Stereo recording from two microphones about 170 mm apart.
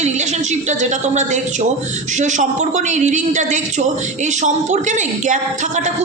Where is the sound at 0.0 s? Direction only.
40° right (ahead or behind).